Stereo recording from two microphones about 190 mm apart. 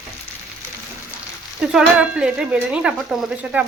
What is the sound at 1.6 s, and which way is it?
Speech, 5° right (ahead or behind).